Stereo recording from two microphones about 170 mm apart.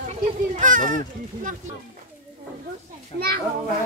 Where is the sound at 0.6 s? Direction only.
50° right (ahead or behind).